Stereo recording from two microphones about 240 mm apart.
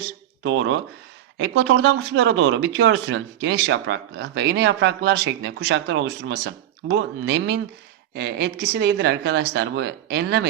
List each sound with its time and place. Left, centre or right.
0.4 s speech: right